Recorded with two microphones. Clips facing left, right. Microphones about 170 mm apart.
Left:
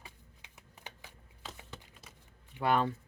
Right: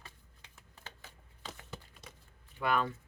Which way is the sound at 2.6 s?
30° left (ahead or behind).